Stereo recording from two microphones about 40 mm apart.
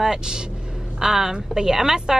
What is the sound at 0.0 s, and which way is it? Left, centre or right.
A woman's voice, centre.